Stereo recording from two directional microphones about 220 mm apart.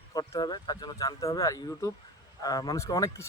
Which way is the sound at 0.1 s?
20° left (ahead or behind).